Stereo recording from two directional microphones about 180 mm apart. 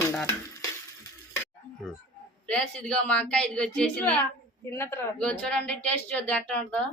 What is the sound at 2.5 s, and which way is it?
A woman's voice, 5° left (ahead or behind).